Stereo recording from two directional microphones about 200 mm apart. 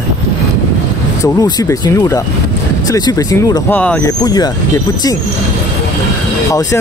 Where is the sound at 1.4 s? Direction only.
20° left (ahead or behind).